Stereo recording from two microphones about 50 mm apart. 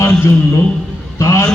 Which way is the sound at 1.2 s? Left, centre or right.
Left.